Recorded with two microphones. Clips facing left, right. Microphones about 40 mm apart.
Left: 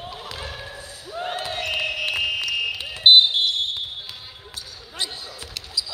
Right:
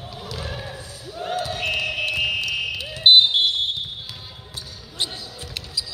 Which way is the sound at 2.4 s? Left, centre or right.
Left.